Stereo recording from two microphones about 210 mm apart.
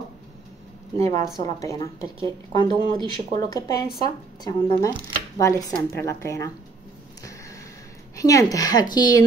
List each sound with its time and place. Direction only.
0.9 s speech: 15° left (ahead or behind)
5.9 s speech: 15° left (ahead or behind)
8.2 s speech: 15° left (ahead or behind)